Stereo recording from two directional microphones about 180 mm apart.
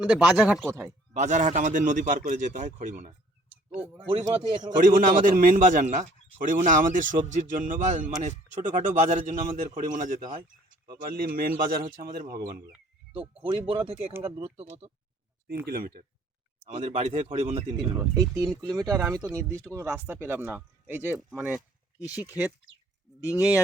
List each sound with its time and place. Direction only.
0.0 s speech: 5° right (ahead or behind)
0.7 s speech: 15° right (ahead or behind)
1.1 s a man's voice: 40° right (ahead or behind)
3.7 s speech: 10° right (ahead or behind)
4.8 s a man's voice: 50° right (ahead or behind)
13.1 s speech: 30° right (ahead or behind)
15.6 s speech: 55° right (ahead or behind)
16.6 s speech: 40° right (ahead or behind)
17.9 s speech: 20° right (ahead or behind)